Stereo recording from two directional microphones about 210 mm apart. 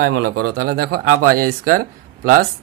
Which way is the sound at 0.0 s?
45° right (ahead or behind).